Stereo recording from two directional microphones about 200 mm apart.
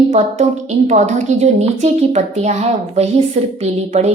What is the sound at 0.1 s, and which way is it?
Speech, 35° right (ahead or behind).